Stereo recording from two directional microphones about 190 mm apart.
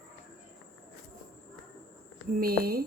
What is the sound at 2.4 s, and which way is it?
Speech, 50° right (ahead or behind).